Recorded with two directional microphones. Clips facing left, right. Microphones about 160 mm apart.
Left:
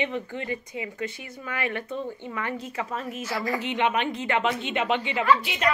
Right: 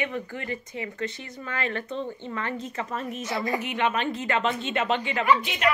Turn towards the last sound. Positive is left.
turn(degrees=-15)  # may be behind; listen again after turning